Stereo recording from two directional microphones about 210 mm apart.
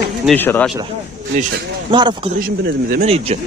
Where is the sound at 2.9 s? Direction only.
30° right (ahead or behind).